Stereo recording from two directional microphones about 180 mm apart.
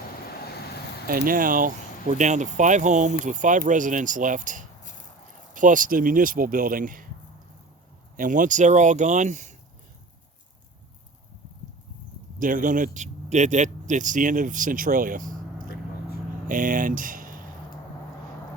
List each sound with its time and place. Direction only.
1.0 s speech: 55° right (ahead or behind)
8.1 s speech: 45° right (ahead or behind)
12.4 s speech: 50° right (ahead or behind)